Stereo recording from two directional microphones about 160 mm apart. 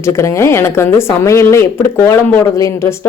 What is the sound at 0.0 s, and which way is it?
A woman's voice, 15° left (ahead or behind).